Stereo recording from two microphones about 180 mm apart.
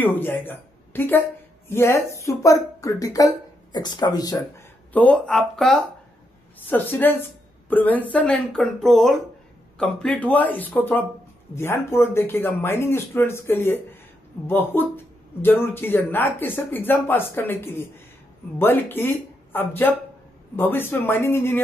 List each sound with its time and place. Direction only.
0.0 s speech: 10° left (ahead or behind)
4.9 s speech: 5° left (ahead or behind)